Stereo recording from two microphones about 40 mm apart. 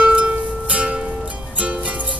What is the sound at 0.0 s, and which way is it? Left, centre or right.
Music, right.